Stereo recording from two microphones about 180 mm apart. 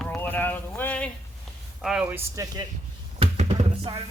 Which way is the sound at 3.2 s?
35° right (ahead or behind).